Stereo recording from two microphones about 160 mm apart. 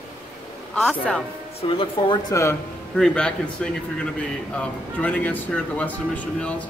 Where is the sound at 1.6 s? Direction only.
30° left (ahead or behind).